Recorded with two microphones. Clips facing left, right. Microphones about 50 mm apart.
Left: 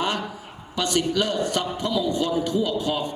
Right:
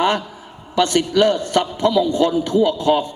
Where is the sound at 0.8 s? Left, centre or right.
Right.